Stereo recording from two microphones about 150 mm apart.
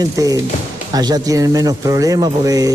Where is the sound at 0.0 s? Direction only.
25° right (ahead or behind).